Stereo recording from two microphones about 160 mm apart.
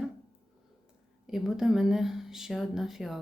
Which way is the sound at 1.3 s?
5° right (ahead or behind).